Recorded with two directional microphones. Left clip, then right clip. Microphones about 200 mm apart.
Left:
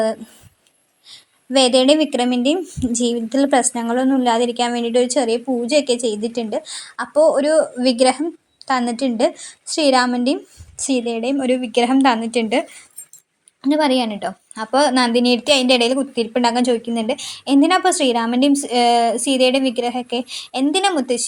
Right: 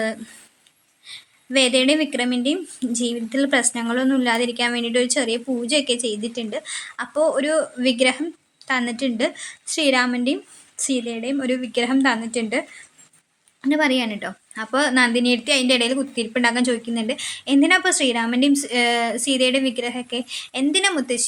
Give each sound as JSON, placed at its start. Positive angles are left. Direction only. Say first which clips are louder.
{"t": 1.0, "sound": "a woman's voice", "louder": "left 1 dB", "side_deg": 15}